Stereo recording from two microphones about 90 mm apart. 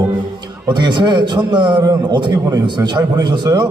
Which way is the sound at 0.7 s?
55° right (ahead or behind).